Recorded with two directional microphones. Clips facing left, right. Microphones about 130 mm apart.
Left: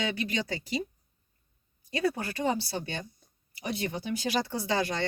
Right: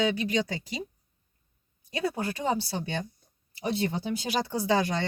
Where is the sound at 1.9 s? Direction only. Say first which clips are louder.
Left 1 dB; 20° right (ahead or behind).